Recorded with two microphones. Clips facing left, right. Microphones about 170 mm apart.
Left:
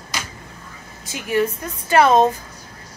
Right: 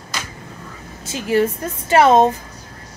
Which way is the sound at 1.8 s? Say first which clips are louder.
Right 2 dB; 25° right (ahead or behind).